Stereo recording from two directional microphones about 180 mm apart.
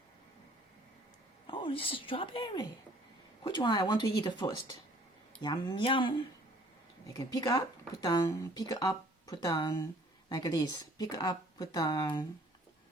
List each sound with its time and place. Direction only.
1.5 s speech: 30° left (ahead or behind)